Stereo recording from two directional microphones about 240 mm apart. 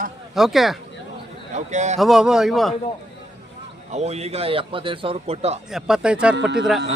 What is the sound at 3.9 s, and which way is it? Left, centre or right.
A man's voice, right.